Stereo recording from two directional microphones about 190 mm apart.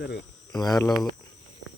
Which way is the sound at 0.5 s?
20° left (ahead or behind).